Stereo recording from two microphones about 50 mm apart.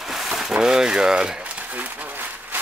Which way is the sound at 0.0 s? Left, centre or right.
Centre.